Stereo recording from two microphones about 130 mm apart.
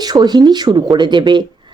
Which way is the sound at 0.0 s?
30° right (ahead or behind).